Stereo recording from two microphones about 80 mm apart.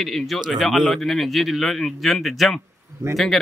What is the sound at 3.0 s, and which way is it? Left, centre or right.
Speech, right.